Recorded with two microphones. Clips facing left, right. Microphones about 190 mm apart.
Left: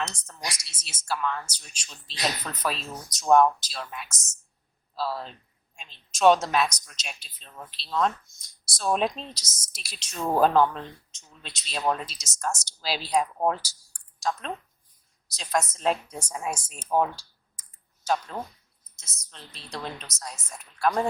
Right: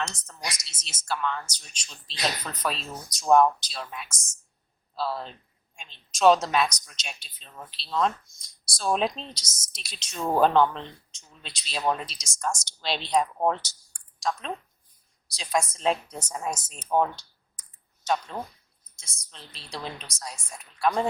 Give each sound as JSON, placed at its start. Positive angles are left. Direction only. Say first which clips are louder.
{"t": 0.4, "sound": "speech", "louder": "even", "side_deg": 10}
{"t": 15.4, "sound": "speech", "louder": "even", "side_deg": 0}
{"t": 17.6, "sound": "computer keyboard", "louder": "right 1 dB", "side_deg": 5}
{"t": 18.9, "sound": "speech", "louder": "left 1 dB", "side_deg": 0}